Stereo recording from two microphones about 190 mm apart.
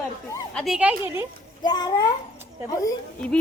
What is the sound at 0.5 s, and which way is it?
Speech, centre (ahead or behind).